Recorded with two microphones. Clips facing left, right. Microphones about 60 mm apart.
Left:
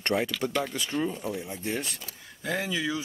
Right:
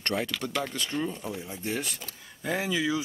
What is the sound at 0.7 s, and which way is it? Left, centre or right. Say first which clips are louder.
Speech: left 2 dB; centre.